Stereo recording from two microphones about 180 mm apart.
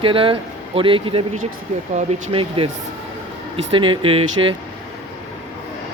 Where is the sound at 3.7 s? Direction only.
30° right (ahead or behind).